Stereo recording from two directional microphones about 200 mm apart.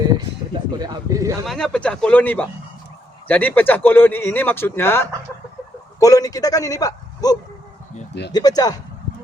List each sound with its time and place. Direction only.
0.8 s speech: 15° right (ahead or behind)
1.5 s speech: 5° left (ahead or behind); by 8.8 s 20° left (ahead or behind)